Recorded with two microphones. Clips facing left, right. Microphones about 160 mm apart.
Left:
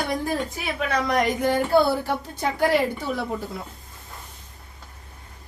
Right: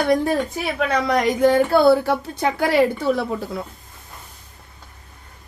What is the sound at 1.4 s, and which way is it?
Speech, 80° right.